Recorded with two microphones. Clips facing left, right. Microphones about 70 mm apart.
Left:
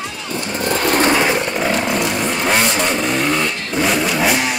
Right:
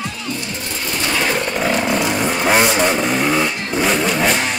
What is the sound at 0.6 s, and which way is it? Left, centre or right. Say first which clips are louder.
Vehicle: left 11 dB; left.